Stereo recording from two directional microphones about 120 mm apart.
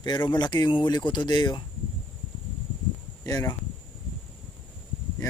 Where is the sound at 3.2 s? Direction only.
30° left (ahead or behind).